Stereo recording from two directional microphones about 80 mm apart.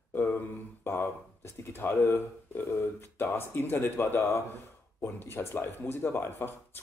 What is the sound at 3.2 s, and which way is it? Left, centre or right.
Speech, left.